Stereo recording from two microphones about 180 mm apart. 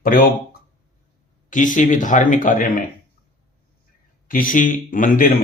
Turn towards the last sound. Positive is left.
turn(degrees=50)  # may be behind; listen again after turning